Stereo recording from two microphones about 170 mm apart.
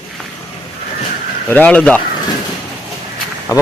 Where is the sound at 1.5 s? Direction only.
10° left (ahead or behind).